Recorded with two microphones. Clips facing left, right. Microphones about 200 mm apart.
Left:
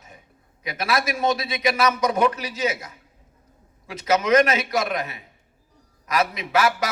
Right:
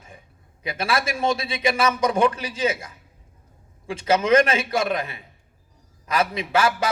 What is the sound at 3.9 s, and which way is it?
A man's voice, 30° right (ahead or behind).